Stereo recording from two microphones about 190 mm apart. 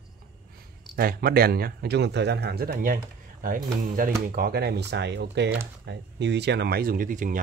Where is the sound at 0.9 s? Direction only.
50° right (ahead or behind).